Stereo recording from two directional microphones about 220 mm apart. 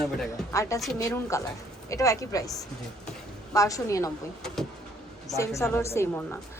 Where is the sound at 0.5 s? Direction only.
15° left (ahead or behind).